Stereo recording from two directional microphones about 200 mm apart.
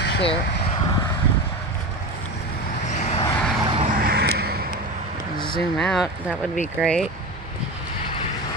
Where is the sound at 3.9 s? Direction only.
50° right (ahead or behind).